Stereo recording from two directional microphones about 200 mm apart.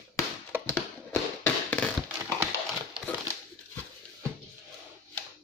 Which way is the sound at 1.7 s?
10° left (ahead or behind).